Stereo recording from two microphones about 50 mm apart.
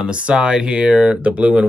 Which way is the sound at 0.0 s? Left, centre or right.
Centre.